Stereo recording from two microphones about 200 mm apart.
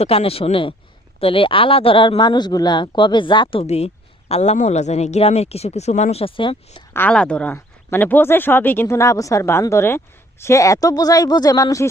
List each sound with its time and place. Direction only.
0.0 s speech: 30° left (ahead or behind)
6.9 s speech: 5° left (ahead or behind)